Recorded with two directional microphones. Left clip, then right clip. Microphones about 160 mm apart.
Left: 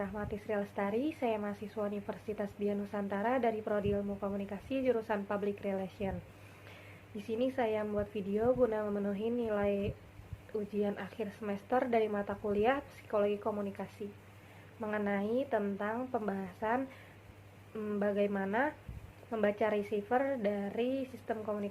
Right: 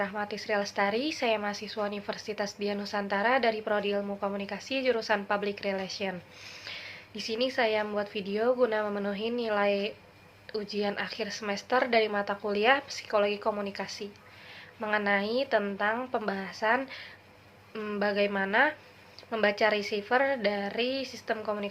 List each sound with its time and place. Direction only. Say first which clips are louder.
0.0 s a woman's voice: right 7 dB; 20° right (ahead or behind)